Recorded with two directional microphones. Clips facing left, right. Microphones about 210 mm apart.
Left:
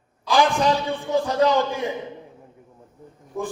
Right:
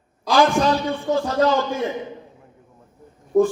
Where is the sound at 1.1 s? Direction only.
15° left (ahead or behind).